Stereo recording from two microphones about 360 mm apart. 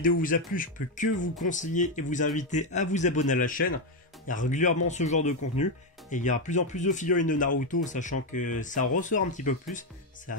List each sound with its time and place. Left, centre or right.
0.2 s speech: left